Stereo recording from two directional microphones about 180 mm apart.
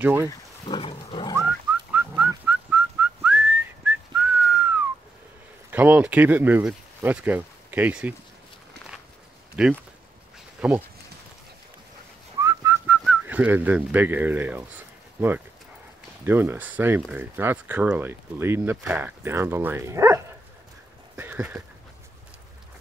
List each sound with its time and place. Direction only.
0.0 s speech: 10° right (ahead or behind)
0.3 s a sound: 30° left (ahead or behind)
2.0 s whistling: 10° right (ahead or behind)
5.7 s speech: 10° right (ahead or behind)
9.6 s speech: 5° right (ahead or behind)
12.4 s whistling: 15° right (ahead or behind)
15.1 s speech: 10° right (ahead or behind)
21.2 s a sound: 10° right (ahead or behind)